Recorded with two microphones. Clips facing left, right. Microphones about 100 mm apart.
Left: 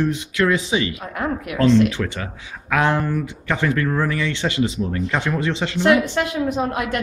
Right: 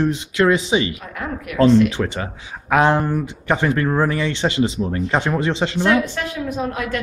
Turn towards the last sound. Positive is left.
turn(degrees=20)  # may be behind; listen again after turning